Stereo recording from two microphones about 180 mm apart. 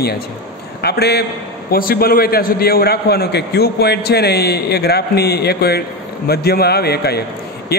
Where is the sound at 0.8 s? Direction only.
65° left (ahead or behind).